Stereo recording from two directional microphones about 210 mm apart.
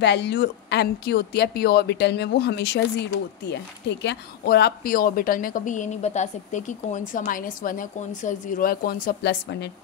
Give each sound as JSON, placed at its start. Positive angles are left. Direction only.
{"t": 0.0, "sound": "speech", "side_deg": 55}